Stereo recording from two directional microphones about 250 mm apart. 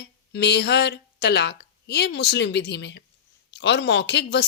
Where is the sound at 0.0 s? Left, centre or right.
Left.